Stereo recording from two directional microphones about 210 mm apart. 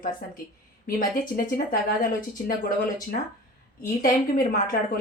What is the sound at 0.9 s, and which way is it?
Speech, 40° left (ahead or behind).